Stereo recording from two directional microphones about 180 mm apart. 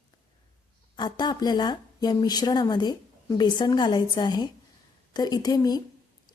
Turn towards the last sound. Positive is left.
turn(degrees=20)  # may be behind; listen again after turning